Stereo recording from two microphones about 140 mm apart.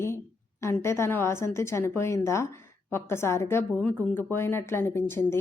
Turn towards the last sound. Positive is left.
turn(degrees=15)  # may be behind; listen again after turning